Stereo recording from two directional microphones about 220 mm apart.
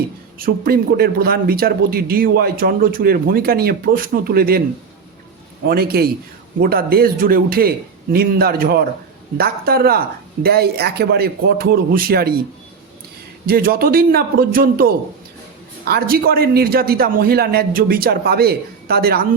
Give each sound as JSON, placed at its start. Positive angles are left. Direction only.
{"t": 0.3, "sound": "a man's voice", "side_deg": -40}
{"t": 5.6, "sound": "a man's voice", "side_deg": -45}
{"t": 13.5, "sound": "a man's voice", "side_deg": -40}